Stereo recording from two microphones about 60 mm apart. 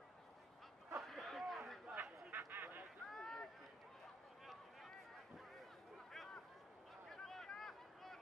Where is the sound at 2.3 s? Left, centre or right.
Right.